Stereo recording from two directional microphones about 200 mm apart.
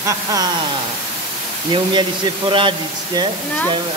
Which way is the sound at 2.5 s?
25° right (ahead or behind).